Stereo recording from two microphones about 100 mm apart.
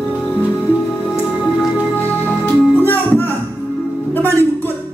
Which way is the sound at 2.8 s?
20° left (ahead or behind).